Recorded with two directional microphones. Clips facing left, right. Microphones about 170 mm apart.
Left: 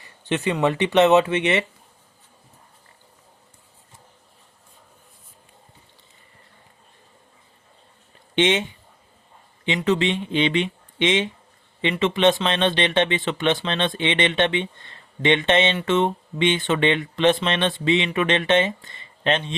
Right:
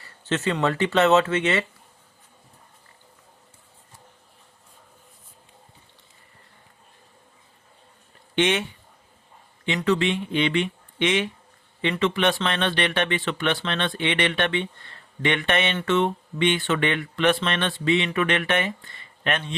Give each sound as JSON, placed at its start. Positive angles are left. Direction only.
{"t": 0.0, "sound": "speech", "side_deg": 15}
{"t": 8.4, "sound": "speech", "side_deg": 20}
{"t": 9.6, "sound": "speech", "side_deg": 20}